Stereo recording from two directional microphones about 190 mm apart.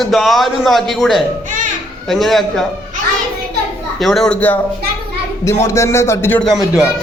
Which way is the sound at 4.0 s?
Centre (ahead or behind).